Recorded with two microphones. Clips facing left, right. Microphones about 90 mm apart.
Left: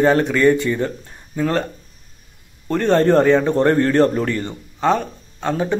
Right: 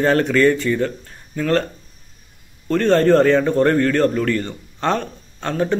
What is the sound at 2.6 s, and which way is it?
A man's voice, 15° left (ahead or behind).